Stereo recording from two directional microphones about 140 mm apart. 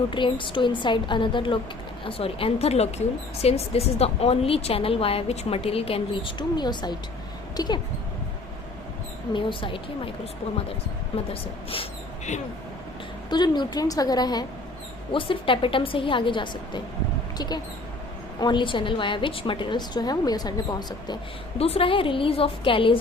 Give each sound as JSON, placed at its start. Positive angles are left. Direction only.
{"t": 0.1, "sound": "a woman's voice", "side_deg": 35}
{"t": 9.3, "sound": "a woman's voice", "side_deg": 35}
{"t": 11.7, "sound": "a sound", "side_deg": 40}
{"t": 13.3, "sound": "a woman's voice", "side_deg": 30}
{"t": 21.6, "sound": "a woman's voice", "side_deg": 40}